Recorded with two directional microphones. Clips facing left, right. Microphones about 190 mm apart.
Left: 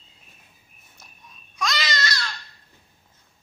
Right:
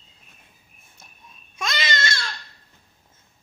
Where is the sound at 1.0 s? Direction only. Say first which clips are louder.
Even; 25° right (ahead or behind).